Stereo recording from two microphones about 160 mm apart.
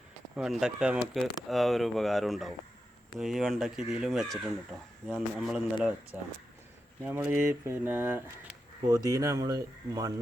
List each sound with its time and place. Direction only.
0.3 s speech: 5° right (ahead or behind); by 10.1 s 25° right (ahead or behind)